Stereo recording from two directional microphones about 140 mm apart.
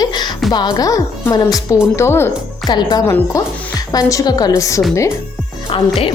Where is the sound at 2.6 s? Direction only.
30° left (ahead or behind).